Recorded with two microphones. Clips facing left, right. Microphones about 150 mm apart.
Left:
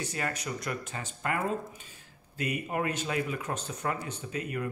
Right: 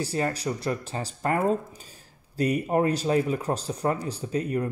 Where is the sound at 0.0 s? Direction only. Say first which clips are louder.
Right 7 dB; 30° right (ahead or behind).